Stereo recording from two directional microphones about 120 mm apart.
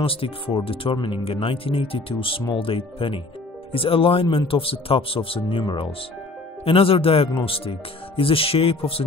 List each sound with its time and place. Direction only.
0.0 s speech: 50° left (ahead or behind)